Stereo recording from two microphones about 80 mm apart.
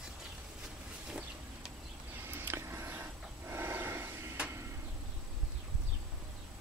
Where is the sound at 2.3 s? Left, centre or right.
Right.